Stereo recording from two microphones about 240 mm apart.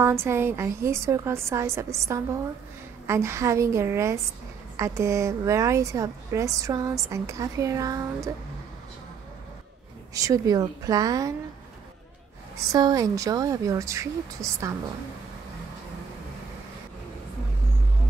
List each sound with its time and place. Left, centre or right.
0.0 s a woman's voice: centre
10.1 s a woman's voice: centre
12.5 s a woman's voice: centre